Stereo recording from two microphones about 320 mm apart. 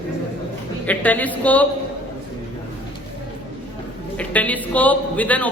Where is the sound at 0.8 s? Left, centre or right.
Centre.